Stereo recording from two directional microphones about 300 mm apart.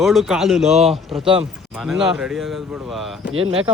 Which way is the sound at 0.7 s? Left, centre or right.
Right.